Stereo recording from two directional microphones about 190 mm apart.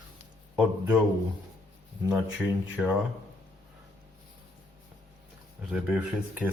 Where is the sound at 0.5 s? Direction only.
5° right (ahead or behind).